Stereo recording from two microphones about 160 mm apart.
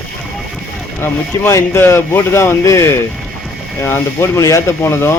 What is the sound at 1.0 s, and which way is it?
Speech, 15° left (ahead or behind).